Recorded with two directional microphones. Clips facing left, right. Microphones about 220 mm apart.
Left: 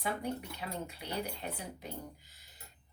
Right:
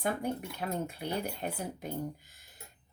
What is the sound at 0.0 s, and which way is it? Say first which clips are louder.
A woman's voice: right 4 dB; 50° right (ahead or behind).